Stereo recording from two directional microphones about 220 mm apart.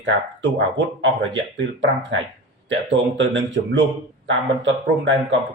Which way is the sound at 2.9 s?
55° right (ahead or behind).